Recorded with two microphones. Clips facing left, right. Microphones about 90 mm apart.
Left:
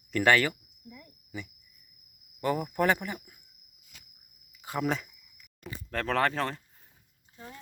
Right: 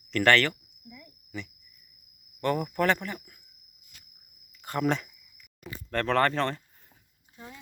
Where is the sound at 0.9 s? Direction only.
30° left (ahead or behind).